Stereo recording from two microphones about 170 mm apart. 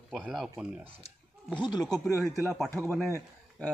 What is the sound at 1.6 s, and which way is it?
Speech, 25° left (ahead or behind).